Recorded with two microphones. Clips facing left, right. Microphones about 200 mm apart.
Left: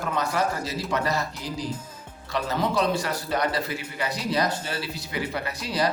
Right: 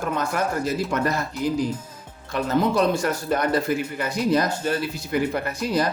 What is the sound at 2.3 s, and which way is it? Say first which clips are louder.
A man's voice: right 4 dB; 50° right (ahead or behind).